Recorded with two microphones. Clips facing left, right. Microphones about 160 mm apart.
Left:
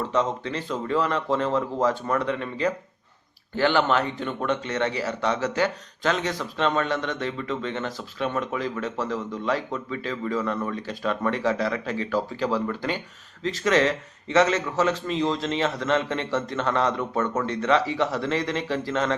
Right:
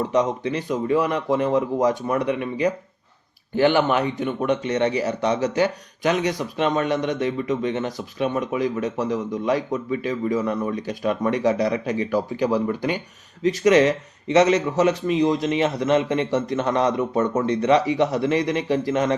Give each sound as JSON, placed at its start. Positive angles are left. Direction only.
{"t": 0.0, "sound": "speech", "side_deg": -15}